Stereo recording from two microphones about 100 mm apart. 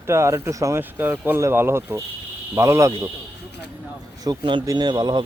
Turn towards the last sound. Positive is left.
turn(degrees=-45)  # may be behind; listen again after turning